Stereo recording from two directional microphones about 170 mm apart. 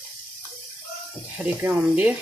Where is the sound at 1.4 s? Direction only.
10° right (ahead or behind).